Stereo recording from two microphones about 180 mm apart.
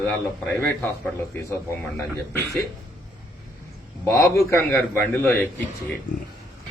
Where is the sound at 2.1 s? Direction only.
15° left (ahead or behind).